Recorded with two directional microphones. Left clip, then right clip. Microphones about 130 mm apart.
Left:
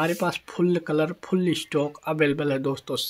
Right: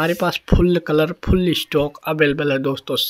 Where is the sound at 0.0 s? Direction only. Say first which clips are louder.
Right 6 dB; 30° right (ahead or behind).